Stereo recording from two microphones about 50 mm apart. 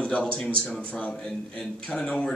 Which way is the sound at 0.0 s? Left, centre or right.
Left.